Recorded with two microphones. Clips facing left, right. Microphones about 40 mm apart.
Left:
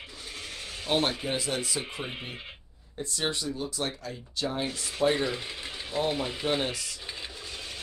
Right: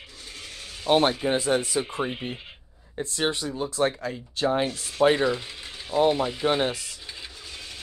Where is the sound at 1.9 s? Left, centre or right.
Right.